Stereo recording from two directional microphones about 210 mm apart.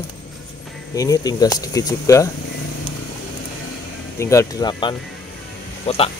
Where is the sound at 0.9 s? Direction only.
15° left (ahead or behind).